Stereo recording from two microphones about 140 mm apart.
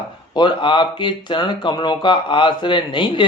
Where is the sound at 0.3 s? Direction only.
35° left (ahead or behind).